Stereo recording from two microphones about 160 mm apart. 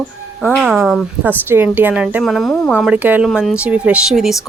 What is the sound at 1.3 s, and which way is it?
Speech, 10° right (ahead or behind).